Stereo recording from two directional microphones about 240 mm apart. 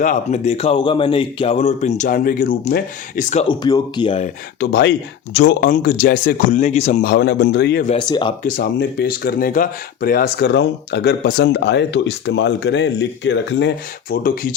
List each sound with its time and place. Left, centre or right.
0.0 s a man's voice: left
3.4 s a man's voice: centre
4.6 s speech: left
7.9 s a man's voice: centre
8.4 s speech: left